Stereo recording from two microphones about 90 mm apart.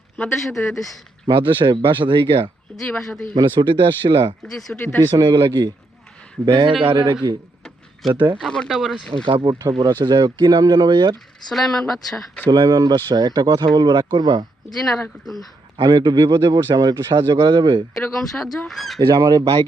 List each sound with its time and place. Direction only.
0.3 s speech: centre (ahead or behind)
1.3 s speech: 65° right (ahead or behind)
2.7 s speech: 5° left (ahead or behind)
3.2 s speech: 60° right (ahead or behind)
4.7 s speech: 10° left (ahead or behind)
5.0 s speech: 50° right (ahead or behind)
8.0 s speech: centre (ahead or behind)
9.2 s speech: 60° right (ahead or behind)
9.6 s speech: 45° right (ahead or behind)
11.4 s speech: 5° left (ahead or behind)
12.5 s speech: 50° right (ahead or behind)
15.8 s speech: 50° right (ahead or behind)
17.9 s speech: 5° left (ahead or behind)
18.9 s speech: 45° right (ahead or behind)